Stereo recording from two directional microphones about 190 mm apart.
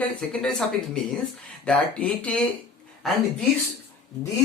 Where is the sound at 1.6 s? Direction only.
5° left (ahead or behind).